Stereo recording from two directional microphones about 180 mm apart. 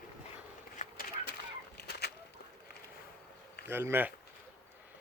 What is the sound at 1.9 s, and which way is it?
Chicken, 65° left (ahead or behind).